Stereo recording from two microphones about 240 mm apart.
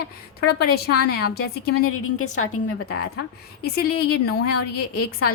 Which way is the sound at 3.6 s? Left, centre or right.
Left.